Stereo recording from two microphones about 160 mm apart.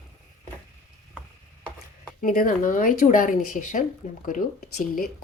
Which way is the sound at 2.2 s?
60° left (ahead or behind).